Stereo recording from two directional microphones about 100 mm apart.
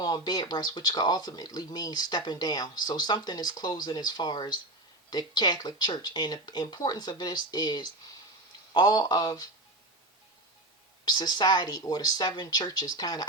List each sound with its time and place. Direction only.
0.0 s speech: 40° left (ahead or behind)
11.0 s speech: 45° left (ahead or behind)